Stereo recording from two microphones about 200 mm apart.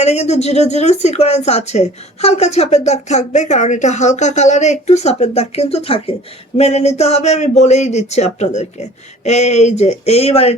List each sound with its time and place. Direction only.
0.0 s speech: 35° left (ahead or behind)